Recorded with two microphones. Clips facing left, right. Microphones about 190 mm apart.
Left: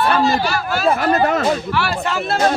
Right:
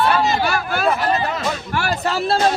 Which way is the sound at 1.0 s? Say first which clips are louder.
Left 4 dB; 50° left (ahead or behind).